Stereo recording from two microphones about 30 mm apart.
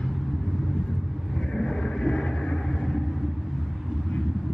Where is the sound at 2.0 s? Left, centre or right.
Left.